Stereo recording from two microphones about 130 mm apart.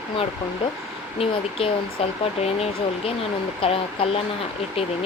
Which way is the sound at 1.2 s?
45° left (ahead or behind).